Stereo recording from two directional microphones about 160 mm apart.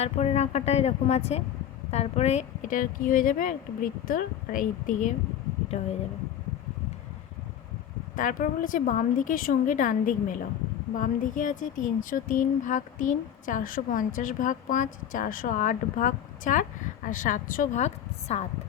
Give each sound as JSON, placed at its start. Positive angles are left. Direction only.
{"t": 0.0, "sound": "speech", "side_deg": 40}
{"t": 5.7, "sound": "speech", "side_deg": 45}
{"t": 8.1, "sound": "speech", "side_deg": 55}